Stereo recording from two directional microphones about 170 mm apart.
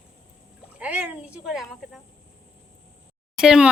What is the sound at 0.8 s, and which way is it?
Speech, 10° right (ahead or behind).